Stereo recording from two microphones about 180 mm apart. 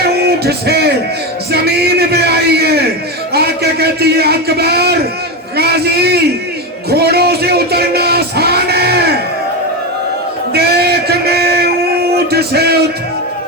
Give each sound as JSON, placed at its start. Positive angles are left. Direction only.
{"t": 0.0, "sound": "music", "side_deg": -65}
{"t": 1.5, "sound": "a man's voice", "side_deg": -65}
{"t": 6.9, "sound": "music", "side_deg": -65}
{"t": 10.5, "sound": "a sound", "side_deg": -60}